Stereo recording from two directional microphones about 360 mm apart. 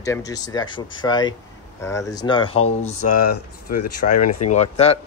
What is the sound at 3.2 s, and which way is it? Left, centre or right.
Speech, left.